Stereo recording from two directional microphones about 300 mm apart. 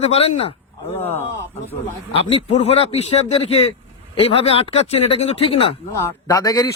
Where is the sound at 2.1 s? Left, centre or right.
Centre.